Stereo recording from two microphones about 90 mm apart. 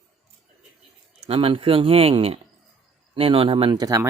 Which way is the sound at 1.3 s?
85° right.